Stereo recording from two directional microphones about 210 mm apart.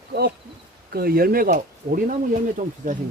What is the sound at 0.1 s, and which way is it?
Speech, 45° right (ahead or behind).